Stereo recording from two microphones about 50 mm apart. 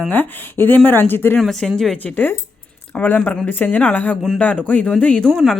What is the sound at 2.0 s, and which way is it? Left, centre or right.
A man's voice, left.